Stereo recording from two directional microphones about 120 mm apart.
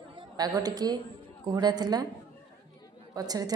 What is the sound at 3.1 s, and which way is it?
Speech, 30° right (ahead or behind).